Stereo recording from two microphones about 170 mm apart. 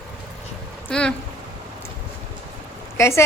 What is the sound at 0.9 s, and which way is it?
Speech, 5° left (ahead or behind).